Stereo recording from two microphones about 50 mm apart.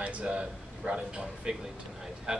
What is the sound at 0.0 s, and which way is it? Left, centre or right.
A man's voice, right.